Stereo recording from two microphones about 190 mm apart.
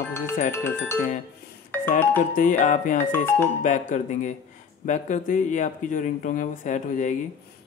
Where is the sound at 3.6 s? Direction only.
40° left (ahead or behind).